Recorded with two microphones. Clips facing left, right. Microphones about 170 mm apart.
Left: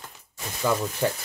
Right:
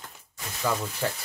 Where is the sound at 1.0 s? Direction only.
25° left (ahead or behind).